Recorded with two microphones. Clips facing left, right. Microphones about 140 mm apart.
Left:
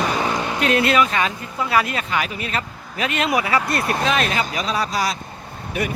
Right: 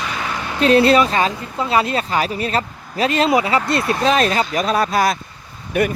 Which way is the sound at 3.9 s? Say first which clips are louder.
Right 6 dB; 35° right (ahead or behind).